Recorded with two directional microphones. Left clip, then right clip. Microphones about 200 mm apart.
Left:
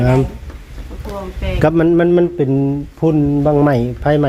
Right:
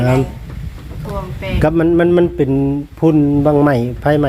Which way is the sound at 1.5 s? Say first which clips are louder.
Even; 10° left (ahead or behind).